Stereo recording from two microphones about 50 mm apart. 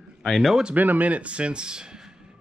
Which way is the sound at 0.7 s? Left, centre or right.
Right.